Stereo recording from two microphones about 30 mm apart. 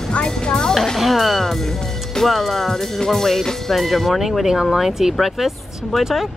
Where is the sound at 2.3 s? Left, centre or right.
Centre.